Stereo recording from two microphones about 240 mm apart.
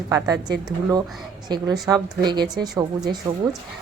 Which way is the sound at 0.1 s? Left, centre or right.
Centre.